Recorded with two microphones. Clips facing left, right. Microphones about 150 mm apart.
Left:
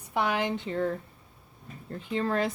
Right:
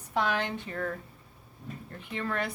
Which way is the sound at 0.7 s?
25° left (ahead or behind).